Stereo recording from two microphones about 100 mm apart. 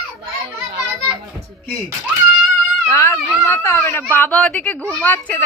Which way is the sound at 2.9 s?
30° left (ahead or behind).